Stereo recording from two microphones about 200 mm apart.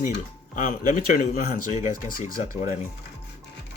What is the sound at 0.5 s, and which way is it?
Speech, 40° left (ahead or behind).